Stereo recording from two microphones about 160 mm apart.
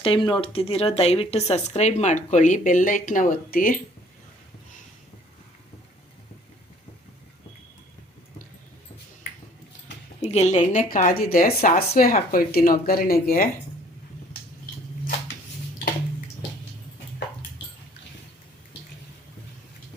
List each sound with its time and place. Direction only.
0.0 s speech: 35° left (ahead or behind); by 3.8 s 60° left (ahead or behind)
10.2 s speech: 45° left (ahead or behind); by 13.5 s 65° left (ahead or behind)